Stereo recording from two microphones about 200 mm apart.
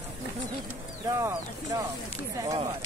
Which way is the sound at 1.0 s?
15° right (ahead or behind).